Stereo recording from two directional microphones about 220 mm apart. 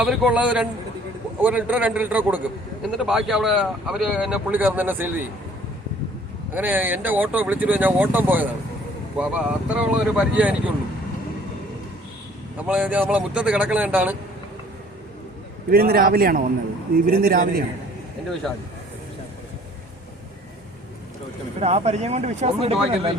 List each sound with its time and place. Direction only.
0.0 s speech: 5° right (ahead or behind)
6.5 s speech: 10° right (ahead or behind)
12.5 s speech: 5° right (ahead or behind)
15.7 s a man's voice: 40° right (ahead or behind)
21.6 s speech: 30° right (ahead or behind)